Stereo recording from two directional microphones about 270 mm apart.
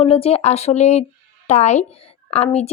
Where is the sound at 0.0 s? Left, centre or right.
Left.